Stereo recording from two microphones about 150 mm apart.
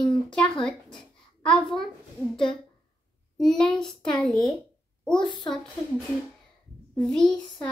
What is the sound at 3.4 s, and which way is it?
Speech, 5° left (ahead or behind).